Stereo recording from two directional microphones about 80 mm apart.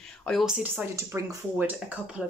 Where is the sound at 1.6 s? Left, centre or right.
Centre.